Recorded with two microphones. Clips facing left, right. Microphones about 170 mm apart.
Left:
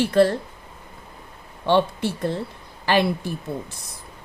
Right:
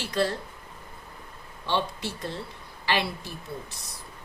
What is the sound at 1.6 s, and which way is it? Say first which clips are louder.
A woman's voice: left 9 dB; 55° left (ahead or behind).